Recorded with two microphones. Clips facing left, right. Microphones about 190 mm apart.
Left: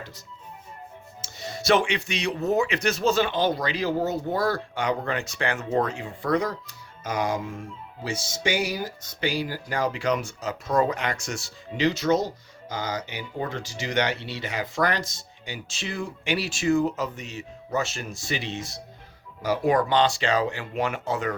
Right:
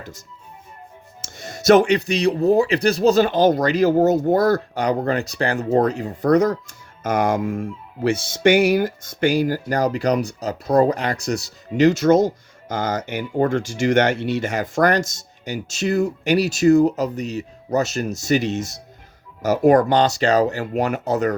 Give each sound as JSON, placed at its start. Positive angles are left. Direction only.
{"t": 1.2, "sound": "speech", "side_deg": -45}